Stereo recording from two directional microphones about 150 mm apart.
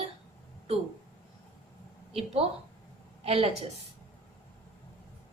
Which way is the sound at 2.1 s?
40° right (ahead or behind).